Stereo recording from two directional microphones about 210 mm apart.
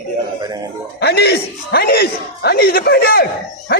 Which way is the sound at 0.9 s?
50° left (ahead or behind).